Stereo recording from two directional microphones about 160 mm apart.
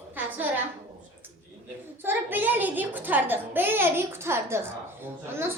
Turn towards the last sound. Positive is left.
turn(degrees=-15)  # may be behind; listen again after turning